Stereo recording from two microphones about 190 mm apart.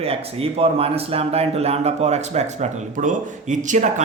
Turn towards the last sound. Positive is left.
turn(degrees=-40)  # may be behind; listen again after turning